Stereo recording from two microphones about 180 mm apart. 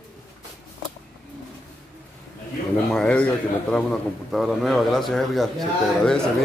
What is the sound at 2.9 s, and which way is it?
Speech, 5° left (ahead or behind).